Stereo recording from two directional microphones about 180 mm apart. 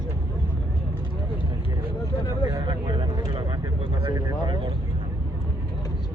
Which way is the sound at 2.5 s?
25° right (ahead or behind).